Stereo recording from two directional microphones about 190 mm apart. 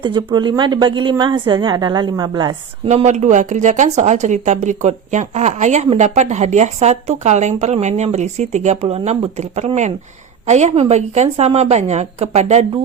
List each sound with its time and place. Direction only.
0.0 s a woman's voice: 25° right (ahead or behind)
2.9 s a woman's voice: 35° right (ahead or behind)